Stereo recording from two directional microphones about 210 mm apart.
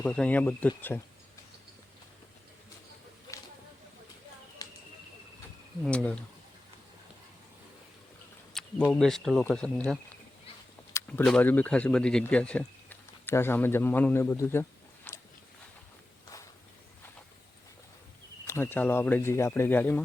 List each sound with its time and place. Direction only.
0.0 s speech: 10° left (ahead or behind)
4.6 s a sound: 15° left (ahead or behind)
5.8 s speech: 5° left (ahead or behind)
8.5 s speech: 5° left (ahead or behind)
16.2 s walk: 15° left (ahead or behind)
18.4 s speech: 10° left (ahead or behind)